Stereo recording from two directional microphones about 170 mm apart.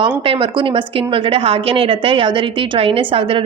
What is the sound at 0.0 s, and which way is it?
A woman's voice, 30° right (ahead or behind).